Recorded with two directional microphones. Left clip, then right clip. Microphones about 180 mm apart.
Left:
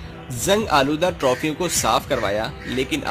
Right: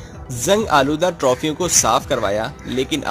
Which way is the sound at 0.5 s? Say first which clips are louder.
Right 3 dB; 20° right (ahead or behind).